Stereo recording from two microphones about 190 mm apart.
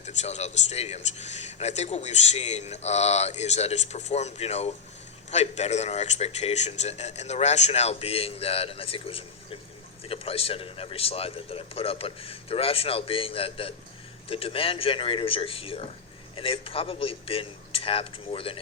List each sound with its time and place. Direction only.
0.0 s a man's voice: 35° left (ahead or behind)